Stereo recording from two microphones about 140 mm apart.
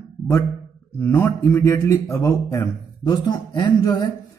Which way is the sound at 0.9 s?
20° left (ahead or behind).